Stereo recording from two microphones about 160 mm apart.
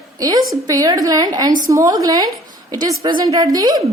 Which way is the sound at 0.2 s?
25° right (ahead or behind).